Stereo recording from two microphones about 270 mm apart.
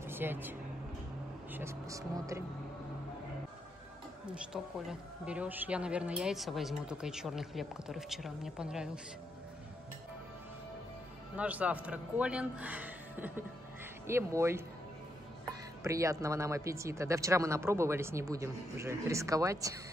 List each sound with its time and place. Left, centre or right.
0.0 s speech: centre
4.8 s speech: centre
11.3 s speech: centre
15.8 s speech: centre